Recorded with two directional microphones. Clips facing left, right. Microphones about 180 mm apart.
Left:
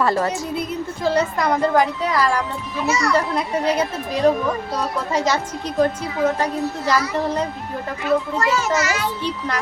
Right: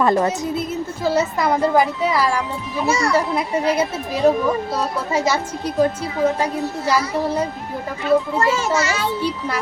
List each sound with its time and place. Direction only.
0.0 s a child's voice: 20° right (ahead or behind)
1.0 s a child's voice: 5° right (ahead or behind)
2.8 s a woman's voice: 30° right (ahead or behind)
3.1 s speech: 5° right (ahead or behind)
8.4 s a child's voice: 30° right (ahead or behind)